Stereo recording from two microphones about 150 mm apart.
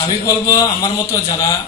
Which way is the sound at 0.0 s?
25° left (ahead or behind).